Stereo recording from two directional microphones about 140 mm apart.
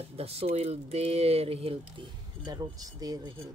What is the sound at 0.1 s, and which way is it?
Speech, 45° right (ahead or behind).